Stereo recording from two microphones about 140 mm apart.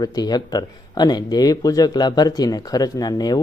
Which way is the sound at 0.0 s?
30° left (ahead or behind).